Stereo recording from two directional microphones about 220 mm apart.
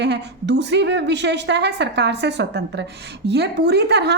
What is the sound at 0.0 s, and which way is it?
A woman's voice, 50° right (ahead or behind).